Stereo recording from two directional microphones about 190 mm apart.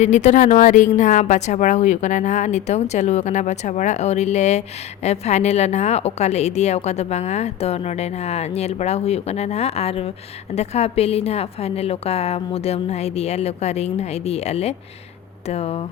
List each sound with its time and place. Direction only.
0.0 s a woman's voice: 40° left (ahead or behind)